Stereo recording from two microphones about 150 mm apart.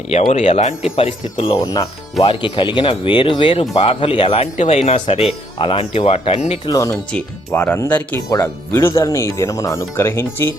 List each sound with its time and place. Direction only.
0.1 s speech: 50° left (ahead or behind)
4.5 s speech: 50° left (ahead or behind)
6.7 s speech: 20° left (ahead or behind)
6.9 s speech: 10° left (ahead or behind)
8.3 s speech: 25° left (ahead or behind)